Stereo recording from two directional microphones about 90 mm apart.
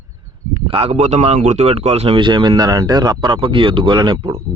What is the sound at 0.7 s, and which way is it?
Speech, 90° right.